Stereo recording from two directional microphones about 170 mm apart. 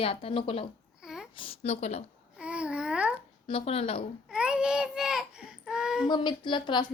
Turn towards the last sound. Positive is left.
turn(degrees=25)  # may be behind; listen again after turning